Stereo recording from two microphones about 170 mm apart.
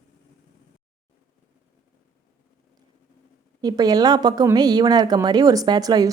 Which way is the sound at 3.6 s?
20° right (ahead or behind).